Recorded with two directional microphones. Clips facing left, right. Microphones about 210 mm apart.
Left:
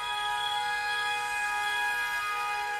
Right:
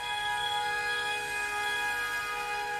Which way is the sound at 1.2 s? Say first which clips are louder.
Left 2 dB; 40° right (ahead or behind).